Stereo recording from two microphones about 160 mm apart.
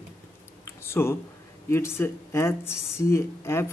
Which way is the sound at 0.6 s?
15° left (ahead or behind).